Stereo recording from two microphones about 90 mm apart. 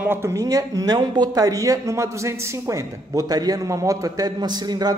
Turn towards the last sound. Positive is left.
turn(degrees=-50)  # may be behind; listen again after turning